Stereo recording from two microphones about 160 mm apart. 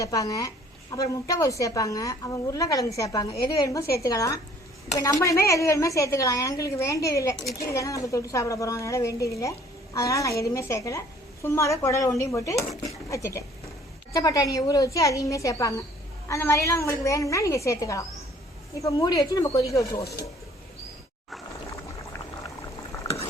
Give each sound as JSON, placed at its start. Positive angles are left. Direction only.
{"t": 0.0, "sound": "a woman's voice", "side_deg": 20}
{"t": 21.7, "sound": "boiling", "side_deg": 20}